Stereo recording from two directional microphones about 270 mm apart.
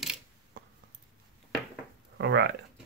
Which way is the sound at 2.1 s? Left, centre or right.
Right.